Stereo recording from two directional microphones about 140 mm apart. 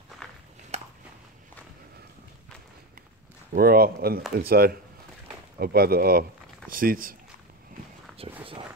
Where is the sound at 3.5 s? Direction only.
90° right.